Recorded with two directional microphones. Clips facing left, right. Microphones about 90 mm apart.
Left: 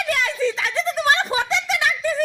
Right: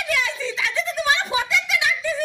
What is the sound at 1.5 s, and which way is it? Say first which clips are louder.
Giggle: left 1 dB; 40° left (ahead or behind).